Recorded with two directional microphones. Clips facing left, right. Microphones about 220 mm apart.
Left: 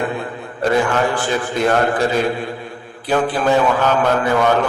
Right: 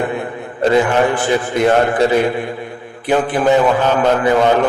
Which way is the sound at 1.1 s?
20° right (ahead or behind).